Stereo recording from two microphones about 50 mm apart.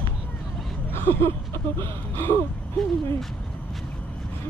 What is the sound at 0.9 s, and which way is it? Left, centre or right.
Speech, left.